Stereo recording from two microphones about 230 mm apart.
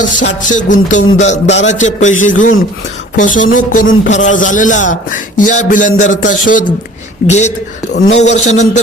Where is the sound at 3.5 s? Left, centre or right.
Left.